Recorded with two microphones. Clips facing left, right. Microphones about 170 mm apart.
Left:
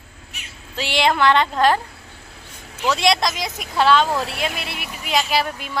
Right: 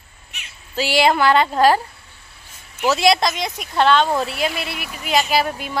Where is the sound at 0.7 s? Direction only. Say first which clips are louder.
Right 3 dB; 5° right (ahead or behind).